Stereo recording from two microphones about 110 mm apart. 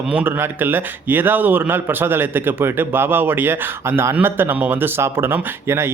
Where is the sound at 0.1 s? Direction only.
20° right (ahead or behind).